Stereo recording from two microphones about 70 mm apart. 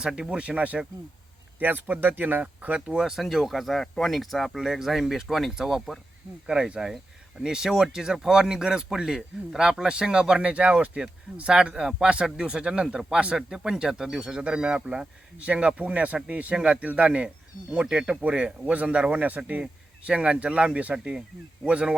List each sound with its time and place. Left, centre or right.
0.0 s speech: centre
2.8 s speech: centre